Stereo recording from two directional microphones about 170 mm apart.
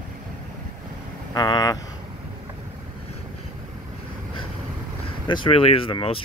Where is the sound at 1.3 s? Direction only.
25° left (ahead or behind).